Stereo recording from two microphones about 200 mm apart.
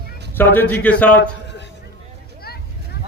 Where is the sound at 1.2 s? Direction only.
60° left (ahead or behind).